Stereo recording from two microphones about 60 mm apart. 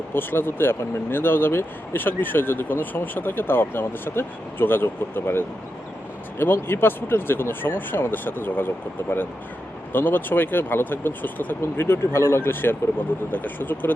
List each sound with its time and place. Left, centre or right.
0.1 s speech: left
6.4 s speech: left
12.4 s speech: left